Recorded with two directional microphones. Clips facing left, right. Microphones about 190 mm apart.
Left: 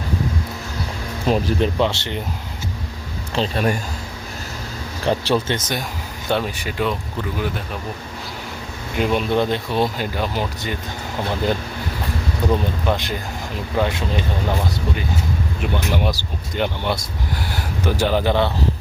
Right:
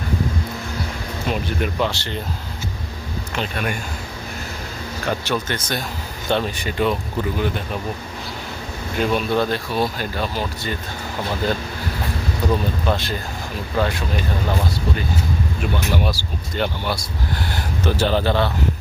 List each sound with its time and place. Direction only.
1.3 s speech: 35° left (ahead or behind)
3.3 s speech: 35° left (ahead or behind)
5.0 s speech: 30° left (ahead or behind)
6.2 s speech: 10° left (ahead or behind)
9.0 s speech: 20° left (ahead or behind)
12.5 s speech: 15° left (ahead or behind)
15.6 s speech: 20° left (ahead or behind)